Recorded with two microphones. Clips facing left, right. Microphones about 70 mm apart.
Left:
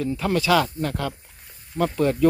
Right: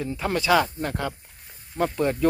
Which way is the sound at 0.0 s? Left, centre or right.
Right.